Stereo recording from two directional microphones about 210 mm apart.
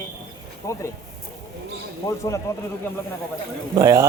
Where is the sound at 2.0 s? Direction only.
15° left (ahead or behind).